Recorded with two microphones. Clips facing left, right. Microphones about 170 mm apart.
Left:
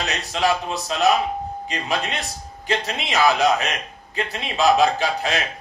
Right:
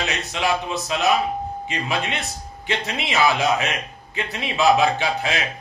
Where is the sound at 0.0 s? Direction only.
40° left (ahead or behind).